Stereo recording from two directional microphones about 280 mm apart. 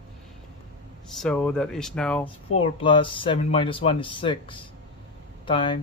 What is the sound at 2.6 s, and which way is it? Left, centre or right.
Speech, centre.